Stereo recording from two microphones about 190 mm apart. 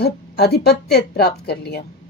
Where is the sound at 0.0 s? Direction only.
60° left (ahead or behind).